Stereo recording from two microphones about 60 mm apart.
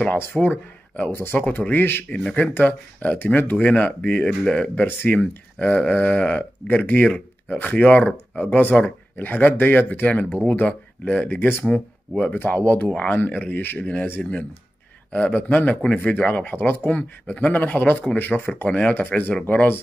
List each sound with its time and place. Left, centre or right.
0.2 s speech: left
2.0 s speech: centre
4.3 s speech: centre
11.2 s speech: left